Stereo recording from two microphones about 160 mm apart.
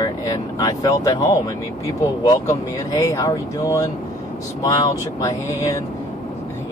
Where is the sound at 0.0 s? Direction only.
25° left (ahead or behind).